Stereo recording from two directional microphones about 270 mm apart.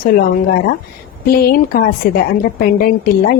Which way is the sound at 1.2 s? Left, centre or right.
Left.